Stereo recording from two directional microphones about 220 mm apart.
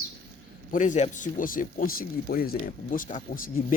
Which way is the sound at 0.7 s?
35° left (ahead or behind).